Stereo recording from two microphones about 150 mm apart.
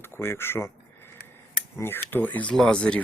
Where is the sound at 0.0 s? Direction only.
15° left (ahead or behind).